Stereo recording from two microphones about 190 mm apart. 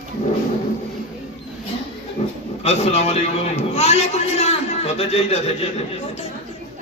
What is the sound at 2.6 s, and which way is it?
A man's voice, 35° left (ahead or behind).